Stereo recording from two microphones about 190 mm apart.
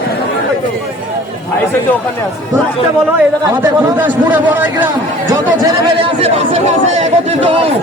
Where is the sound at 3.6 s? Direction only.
10° right (ahead or behind).